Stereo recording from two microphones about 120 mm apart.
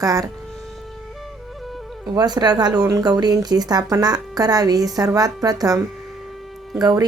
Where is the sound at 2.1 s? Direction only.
35° right (ahead or behind).